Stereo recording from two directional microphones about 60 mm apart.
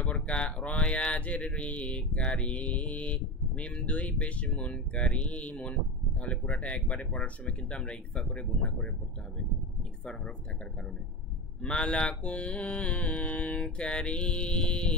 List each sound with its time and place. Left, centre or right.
0.0 s speech: left
11.6 s speech: centre